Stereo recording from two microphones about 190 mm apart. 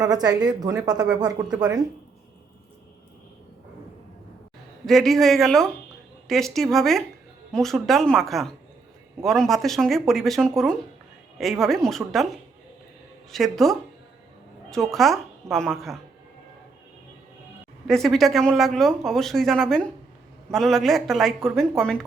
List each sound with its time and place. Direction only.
0.0 s a woman's voice: 20° right (ahead or behind)
4.9 s speech: centre (ahead or behind)
17.8 s speech: centre (ahead or behind)